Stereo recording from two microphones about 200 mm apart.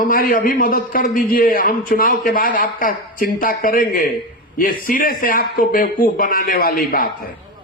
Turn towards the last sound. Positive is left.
turn(degrees=45)  # may be behind; listen again after turning